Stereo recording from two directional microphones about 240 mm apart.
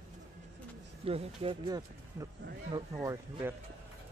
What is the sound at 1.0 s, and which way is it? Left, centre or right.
Speech, right.